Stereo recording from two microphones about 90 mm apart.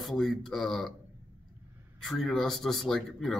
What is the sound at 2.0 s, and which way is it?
Speech, 5° left (ahead or behind).